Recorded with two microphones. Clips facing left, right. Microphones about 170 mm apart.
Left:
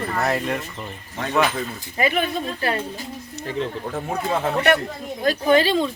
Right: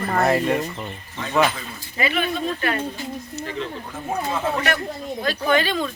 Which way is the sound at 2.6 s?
30° left (ahead or behind).